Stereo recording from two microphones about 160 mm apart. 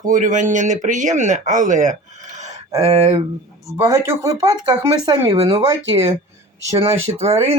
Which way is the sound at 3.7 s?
15° right (ahead or behind).